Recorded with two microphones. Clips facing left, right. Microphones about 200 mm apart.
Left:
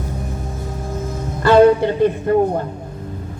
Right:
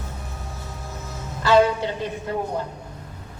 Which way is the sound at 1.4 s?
55° left (ahead or behind).